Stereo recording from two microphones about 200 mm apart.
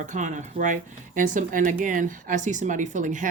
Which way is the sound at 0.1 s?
40° right (ahead or behind).